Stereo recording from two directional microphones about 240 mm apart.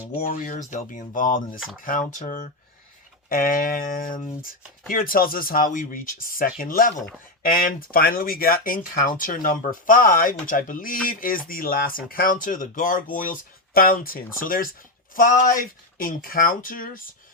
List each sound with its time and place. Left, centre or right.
0.3 s speech: left